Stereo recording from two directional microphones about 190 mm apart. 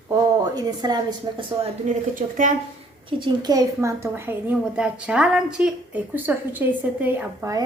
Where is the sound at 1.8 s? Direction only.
40° right (ahead or behind).